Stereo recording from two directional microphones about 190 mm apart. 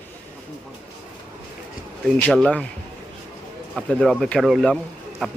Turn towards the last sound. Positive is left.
turn(degrees=5)  # may be behind; listen again after turning